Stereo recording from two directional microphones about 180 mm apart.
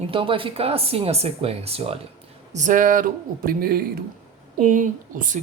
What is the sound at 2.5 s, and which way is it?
Speech, 45° right (ahead or behind).